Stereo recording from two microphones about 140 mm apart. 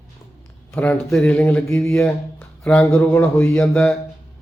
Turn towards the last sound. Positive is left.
turn(degrees=5)  # may be behind; listen again after turning